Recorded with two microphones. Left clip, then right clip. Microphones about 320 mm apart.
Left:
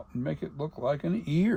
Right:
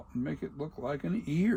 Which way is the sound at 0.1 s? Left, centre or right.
Left.